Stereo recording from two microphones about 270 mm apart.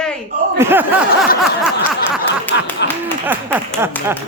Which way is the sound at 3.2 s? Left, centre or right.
Centre.